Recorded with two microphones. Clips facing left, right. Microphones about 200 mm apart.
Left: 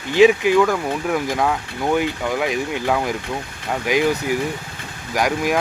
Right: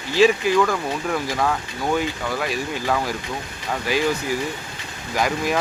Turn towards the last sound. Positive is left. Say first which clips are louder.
# left 2 dB
turn(degrees=10)  # may be behind; listen again after turning